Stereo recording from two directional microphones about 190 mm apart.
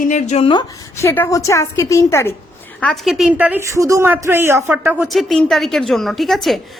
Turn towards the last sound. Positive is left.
turn(degrees=0)  # may be behind; listen again after turning